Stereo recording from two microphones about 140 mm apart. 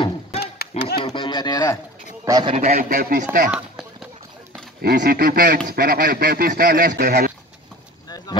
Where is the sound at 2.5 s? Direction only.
55° right (ahead or behind).